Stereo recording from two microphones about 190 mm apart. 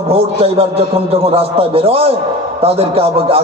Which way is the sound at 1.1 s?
30° right (ahead or behind).